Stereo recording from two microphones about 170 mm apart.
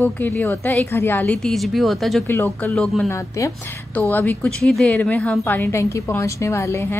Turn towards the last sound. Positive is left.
turn(degrees=15)  # may be behind; listen again after turning